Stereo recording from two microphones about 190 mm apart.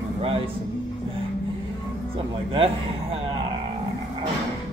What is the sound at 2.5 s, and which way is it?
Speech, 30° right (ahead or behind).